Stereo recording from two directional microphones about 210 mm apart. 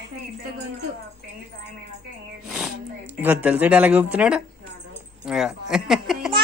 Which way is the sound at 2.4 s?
5° right (ahead or behind).